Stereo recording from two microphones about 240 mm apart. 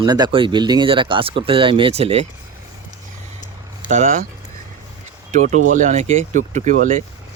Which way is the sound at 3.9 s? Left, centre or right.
Right.